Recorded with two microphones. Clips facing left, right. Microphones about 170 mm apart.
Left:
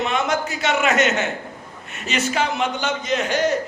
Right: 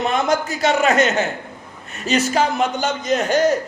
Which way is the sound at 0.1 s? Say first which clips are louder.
Right 3 dB; 35° right (ahead or behind).